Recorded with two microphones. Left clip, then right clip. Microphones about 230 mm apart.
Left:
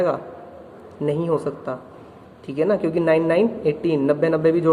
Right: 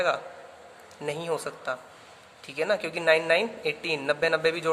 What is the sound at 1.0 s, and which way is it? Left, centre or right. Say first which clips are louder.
A woman's voice: left 8 dB; right.